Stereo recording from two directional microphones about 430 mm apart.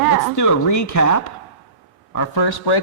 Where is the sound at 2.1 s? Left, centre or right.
Left.